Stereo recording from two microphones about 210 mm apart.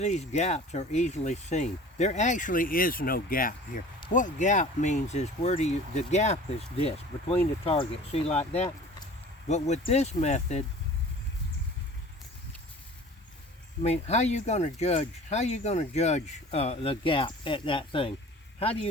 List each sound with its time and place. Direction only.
0.0 s speech: 35° left (ahead or behind)
7.6 s speech: 30° left (ahead or behind)
13.8 s speech: 30° left (ahead or behind)